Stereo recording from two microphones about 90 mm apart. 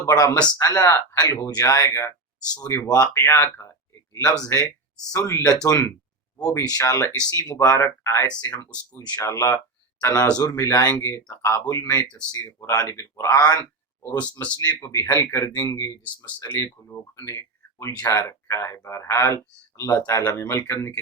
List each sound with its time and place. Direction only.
0.1 s speech: 45° left (ahead or behind)
4.4 s speech: 30° left (ahead or behind)
12.1 s speech: 50° left (ahead or behind)
12.5 s speech: 35° left (ahead or behind)
13.4 s speech: 40° left (ahead or behind)
14.8 s speech: 30° left (ahead or behind)
16.5 s speech: 25° left (ahead or behind)